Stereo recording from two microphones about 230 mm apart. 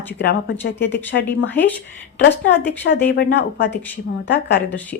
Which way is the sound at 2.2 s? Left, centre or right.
Left.